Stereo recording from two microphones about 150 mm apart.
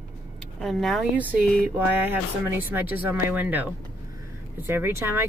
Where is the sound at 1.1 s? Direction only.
10° right (ahead or behind).